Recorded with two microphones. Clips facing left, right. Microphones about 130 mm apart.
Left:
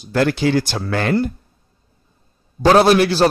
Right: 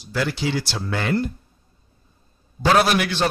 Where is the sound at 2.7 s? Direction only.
35° left (ahead or behind).